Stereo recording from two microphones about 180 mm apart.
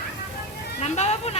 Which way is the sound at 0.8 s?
40° left (ahead or behind).